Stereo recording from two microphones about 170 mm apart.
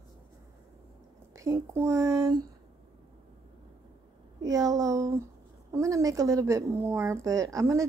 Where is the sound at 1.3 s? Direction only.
15° right (ahead or behind).